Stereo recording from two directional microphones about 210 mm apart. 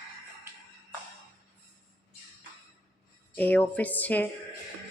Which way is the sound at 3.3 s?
10° left (ahead or behind).